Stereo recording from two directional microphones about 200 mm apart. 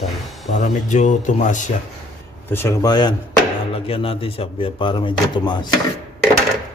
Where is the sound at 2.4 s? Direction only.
10° left (ahead or behind).